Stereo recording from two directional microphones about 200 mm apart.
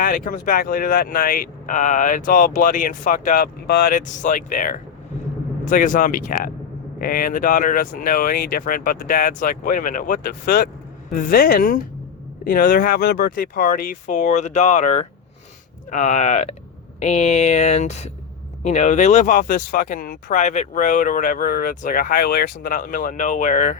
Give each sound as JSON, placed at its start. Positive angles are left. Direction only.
{"t": 0.0, "sound": "speech", "side_deg": 40}